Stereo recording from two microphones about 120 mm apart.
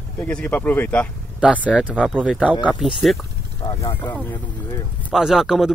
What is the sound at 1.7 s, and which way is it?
Speech, 10° right (ahead or behind).